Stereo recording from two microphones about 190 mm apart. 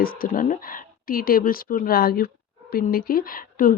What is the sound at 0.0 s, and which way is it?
Speech, 50° left (ahead or behind).